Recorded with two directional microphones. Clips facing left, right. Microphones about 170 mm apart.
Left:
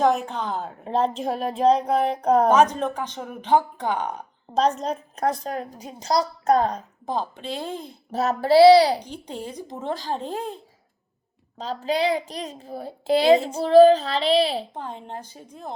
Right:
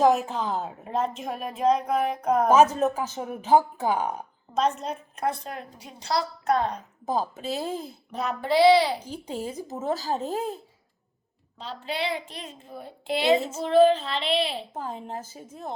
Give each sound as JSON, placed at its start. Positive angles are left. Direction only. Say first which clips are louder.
{"t": 0.0, "sound": "a child's voice", "louder": "even", "side_deg": 0}
{"t": 0.9, "sound": "a child's voice", "louder": "left 6 dB", "side_deg": 30}
{"t": 2.5, "sound": "speech", "louder": "even", "side_deg": -5}
{"t": 4.5, "sound": "a child's voice", "louder": "left 4 dB", "side_deg": 35}
{"t": 7.0, "sound": "a child's voice", "louder": "right 1 dB", "side_deg": -5}
{"t": 8.1, "sound": "a child's voice", "louder": "left 7 dB", "side_deg": 40}
{"t": 9.0, "sound": "a child's voice", "louder": "right 1 dB", "side_deg": -5}
{"t": 11.5, "sound": "a child's voice", "louder": "left 8 dB", "side_deg": 40}
{"t": 14.7, "sound": "a child's voice", "louder": "even", "side_deg": -5}